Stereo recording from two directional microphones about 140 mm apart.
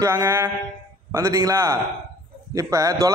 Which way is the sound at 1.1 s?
20° right (ahead or behind).